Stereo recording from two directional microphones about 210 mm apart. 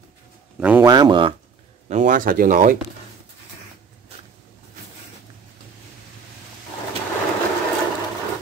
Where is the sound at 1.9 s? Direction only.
35° right (ahead or behind).